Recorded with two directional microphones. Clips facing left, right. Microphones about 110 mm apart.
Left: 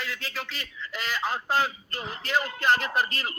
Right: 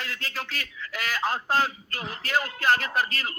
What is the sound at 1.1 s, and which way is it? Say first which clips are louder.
Speech: right 1 dB; centre (ahead or behind).